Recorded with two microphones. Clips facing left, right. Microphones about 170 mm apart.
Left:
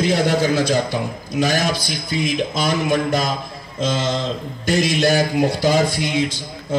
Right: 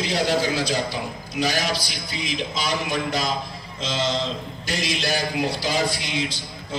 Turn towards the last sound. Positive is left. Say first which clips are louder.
# left 6 dB
turn(degrees=50)  # may be behind; listen again after turning